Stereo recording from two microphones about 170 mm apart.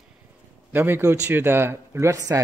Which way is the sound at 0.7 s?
15° right (ahead or behind).